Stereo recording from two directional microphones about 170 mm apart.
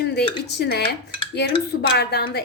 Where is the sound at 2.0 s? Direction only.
70° left (ahead or behind).